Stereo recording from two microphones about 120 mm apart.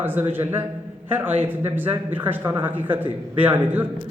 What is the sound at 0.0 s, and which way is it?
Speech, 15° right (ahead or behind).